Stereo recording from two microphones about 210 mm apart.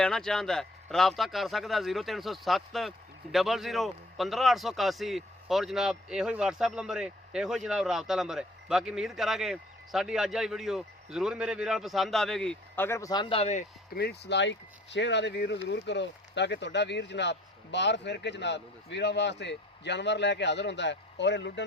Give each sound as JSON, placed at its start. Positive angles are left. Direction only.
{"t": 0.0, "sound": "a man's voice", "side_deg": 5}
{"t": 13.9, "sound": "speech", "side_deg": 50}